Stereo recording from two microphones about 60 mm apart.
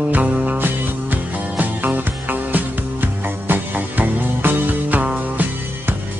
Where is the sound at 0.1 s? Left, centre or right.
Right.